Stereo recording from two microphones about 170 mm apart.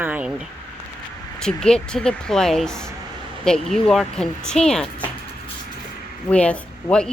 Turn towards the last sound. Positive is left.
turn(degrees=5)  # may be behind; listen again after turning